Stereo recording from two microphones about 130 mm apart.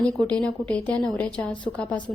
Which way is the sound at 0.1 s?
5° left (ahead or behind).